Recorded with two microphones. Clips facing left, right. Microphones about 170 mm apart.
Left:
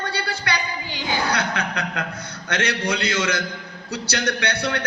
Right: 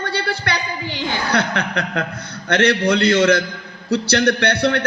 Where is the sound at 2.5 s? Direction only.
60° right (ahead or behind).